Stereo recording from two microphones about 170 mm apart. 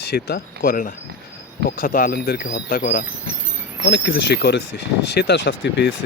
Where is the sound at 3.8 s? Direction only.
80° left.